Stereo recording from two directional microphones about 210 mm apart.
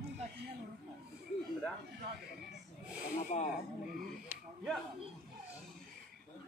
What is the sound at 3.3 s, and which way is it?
Speech, 30° left (ahead or behind).